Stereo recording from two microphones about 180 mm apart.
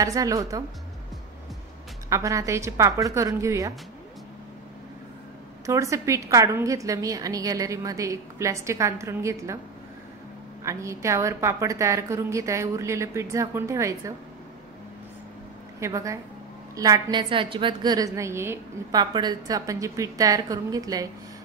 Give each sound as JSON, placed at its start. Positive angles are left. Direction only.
{"t": 0.0, "sound": "a woman's voice", "side_deg": -20}
{"t": 2.0, "sound": "a woman's voice", "side_deg": -15}
{"t": 5.7, "sound": "a woman's voice", "side_deg": -15}
{"t": 10.6, "sound": "a woman's voice", "side_deg": -15}
{"t": 15.8, "sound": "a woman's voice", "side_deg": -20}